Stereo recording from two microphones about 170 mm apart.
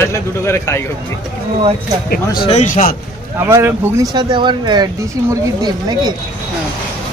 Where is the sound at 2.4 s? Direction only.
40° left (ahead or behind).